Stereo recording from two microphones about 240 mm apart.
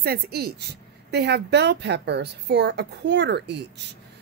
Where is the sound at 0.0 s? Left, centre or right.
Right.